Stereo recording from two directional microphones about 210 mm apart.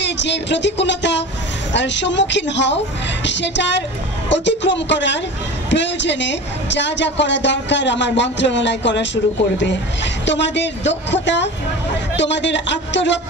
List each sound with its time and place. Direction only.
0.0 s a woman's voice: 55° left (ahead or behind)